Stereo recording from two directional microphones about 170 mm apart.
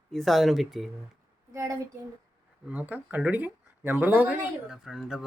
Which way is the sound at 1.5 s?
20° right (ahead or behind).